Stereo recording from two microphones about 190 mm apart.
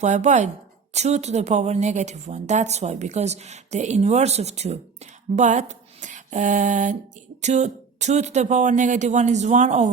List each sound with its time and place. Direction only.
0.0 s a woman's voice: 40° right (ahead or behind)